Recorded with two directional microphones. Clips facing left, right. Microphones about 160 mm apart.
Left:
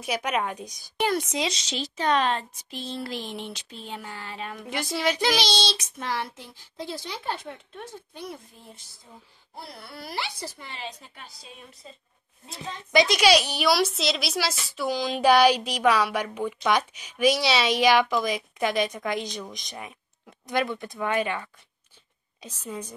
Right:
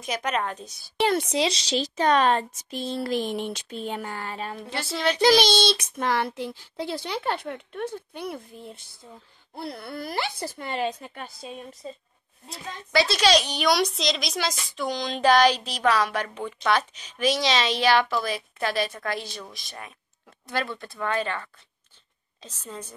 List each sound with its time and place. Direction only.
0.0 s a woman's voice: 10° left (ahead or behind)
1.0 s speech: 30° right (ahead or behind); by 4.5 s 45° right (ahead or behind)
4.6 s a woman's voice: 15° left (ahead or behind)
5.1 s child singing: 35° right (ahead or behind)
5.4 s a child's voice: 55° right (ahead or behind)
12.5 s a woman's voice: 20° left (ahead or behind)